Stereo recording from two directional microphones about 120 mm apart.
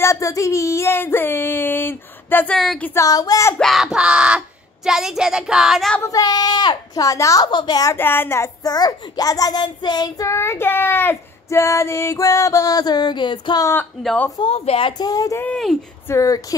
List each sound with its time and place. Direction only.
0.0 s child singing: 25° left (ahead or behind)
3.5 s a sound: centre (ahead or behind)
4.8 s speech: 5° right (ahead or behind)
6.0 s child singing: 30° left (ahead or behind)
7.9 s child singing: 20° left (ahead or behind)
8.6 s child singing: 35° left (ahead or behind)
14.4 s speech: 60° left (ahead or behind)
15.0 s child singing: 30° left (ahead or behind)
15.4 s speech: 5° left (ahead or behind)
16.1 s child singing: 30° left (ahead or behind)